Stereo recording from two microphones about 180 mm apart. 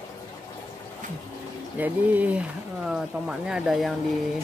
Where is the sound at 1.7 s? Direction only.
10° right (ahead or behind).